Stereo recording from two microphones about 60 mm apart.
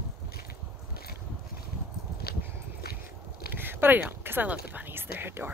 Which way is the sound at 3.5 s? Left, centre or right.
Right.